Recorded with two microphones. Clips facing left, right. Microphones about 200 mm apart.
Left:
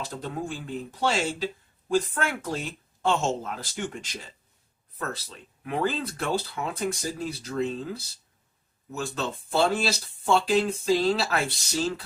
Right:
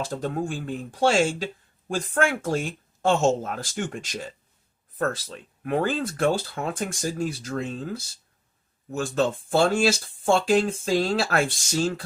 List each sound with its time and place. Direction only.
0.0 s speech: 45° right (ahead or behind)